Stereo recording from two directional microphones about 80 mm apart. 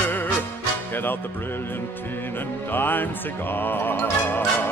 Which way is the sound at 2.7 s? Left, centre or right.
Left.